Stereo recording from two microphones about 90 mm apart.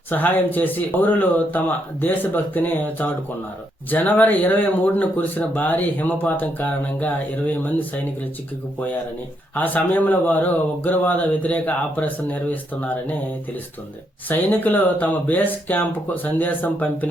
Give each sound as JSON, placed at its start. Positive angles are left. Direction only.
{"t": 0.1, "sound": "speech", "side_deg": 20}
{"t": 9.6, "sound": "speech", "side_deg": 20}